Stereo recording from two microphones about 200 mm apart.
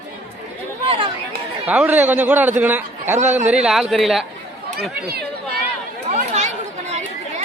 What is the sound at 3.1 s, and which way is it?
Speech, 35° right (ahead or behind).